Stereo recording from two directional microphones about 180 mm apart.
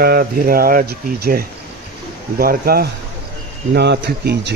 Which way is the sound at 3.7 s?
70° right (ahead or behind).